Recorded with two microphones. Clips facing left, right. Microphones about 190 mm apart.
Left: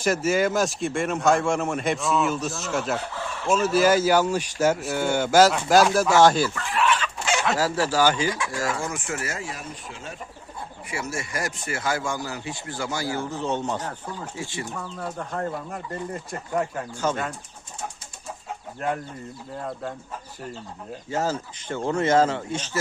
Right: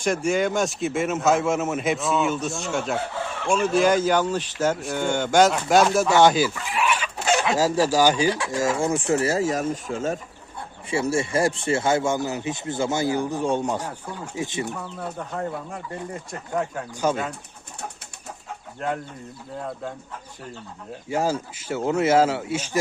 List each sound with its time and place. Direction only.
0.0 s speech: 5° left (ahead or behind); by 10.2 s 45° right (ahead or behind)
10.8 s speech: 30° right (ahead or behind)
14.9 s speech: 5° right (ahead or behind)
17.0 s speech: 10° right (ahead or behind)
18.8 s speech: 5° left (ahead or behind)
21.1 s speech: 10° right (ahead or behind)